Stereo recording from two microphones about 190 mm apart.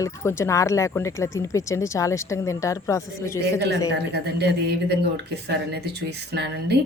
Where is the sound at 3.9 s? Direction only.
60° right (ahead or behind).